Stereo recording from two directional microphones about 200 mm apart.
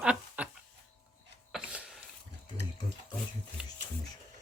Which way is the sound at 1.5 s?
5° right (ahead or behind).